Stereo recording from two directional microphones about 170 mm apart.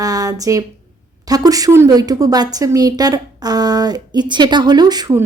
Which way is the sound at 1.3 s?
20° right (ahead or behind).